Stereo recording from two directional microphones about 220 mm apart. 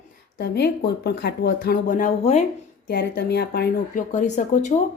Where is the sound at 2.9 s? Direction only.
45° left (ahead or behind).